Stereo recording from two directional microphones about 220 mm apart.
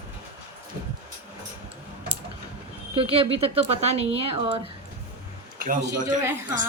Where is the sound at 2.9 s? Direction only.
25° right (ahead or behind).